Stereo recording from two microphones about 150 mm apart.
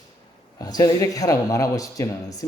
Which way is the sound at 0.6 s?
25° left (ahead or behind).